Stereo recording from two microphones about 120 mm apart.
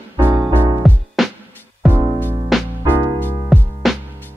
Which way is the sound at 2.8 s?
15° left (ahead or behind).